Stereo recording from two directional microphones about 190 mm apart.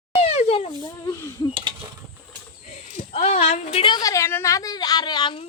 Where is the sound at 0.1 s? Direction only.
35° left (ahead or behind).